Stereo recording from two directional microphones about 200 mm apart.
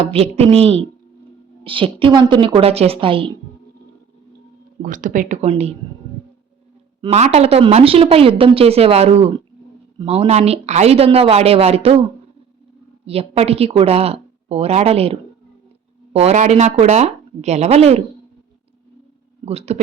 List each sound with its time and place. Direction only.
0.0 s speech: 30° right (ahead or behind)
4.8 s speech: 40° right (ahead or behind)
7.0 s speech: 30° right (ahead or behind)
13.1 s speech: 30° right (ahead or behind)
19.5 s speech: 30° right (ahead or behind)